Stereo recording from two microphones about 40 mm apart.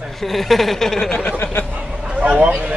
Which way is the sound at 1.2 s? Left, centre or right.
Left.